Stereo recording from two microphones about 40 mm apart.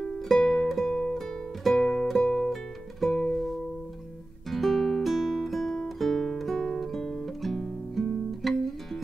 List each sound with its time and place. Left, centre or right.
0.4 s music: centre
1.1 s music: centre
2.2 s music: left
4.5 s music: centre
5.5 s guitar: centre
6.6 s music: centre
8.3 s guitar: centre